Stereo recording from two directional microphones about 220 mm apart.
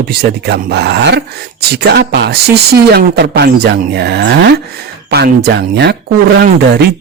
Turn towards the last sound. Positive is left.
turn(degrees=-50)  # may be behind; listen again after turning